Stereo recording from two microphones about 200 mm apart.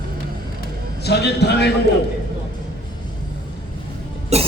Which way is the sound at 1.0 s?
55° left (ahead or behind).